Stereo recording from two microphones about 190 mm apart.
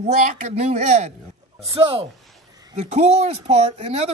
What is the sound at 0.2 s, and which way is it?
Speech, 40° right (ahead or behind).